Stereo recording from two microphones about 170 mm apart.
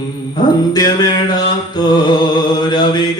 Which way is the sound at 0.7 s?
25° left (ahead or behind).